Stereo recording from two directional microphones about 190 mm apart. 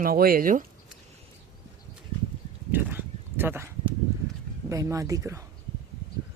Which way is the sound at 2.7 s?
10° right (ahead or behind).